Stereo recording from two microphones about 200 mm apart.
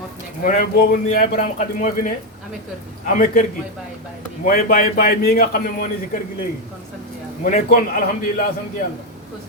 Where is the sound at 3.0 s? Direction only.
45° left (ahead or behind).